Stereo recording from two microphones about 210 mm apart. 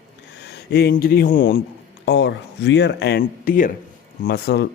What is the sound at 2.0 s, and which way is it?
Speech, 55° left (ahead or behind).